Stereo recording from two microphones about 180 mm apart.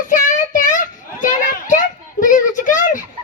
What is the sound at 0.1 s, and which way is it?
Child singing, 45° left (ahead or behind).